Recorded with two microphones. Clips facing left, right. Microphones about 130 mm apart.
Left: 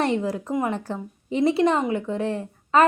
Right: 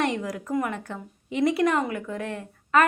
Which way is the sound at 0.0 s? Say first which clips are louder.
Left 3 dB; 30° left (ahead or behind).